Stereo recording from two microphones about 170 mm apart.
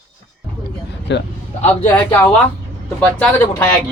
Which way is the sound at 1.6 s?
10° left (ahead or behind).